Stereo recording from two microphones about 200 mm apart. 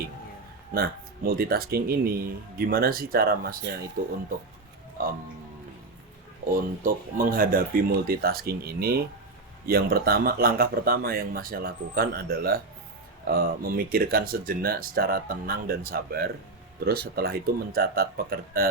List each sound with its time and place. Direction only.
0.7 s speech: 50° right (ahead or behind)
5.0 s speech: 45° right (ahead or behind)
6.5 s speech: 45° right (ahead or behind)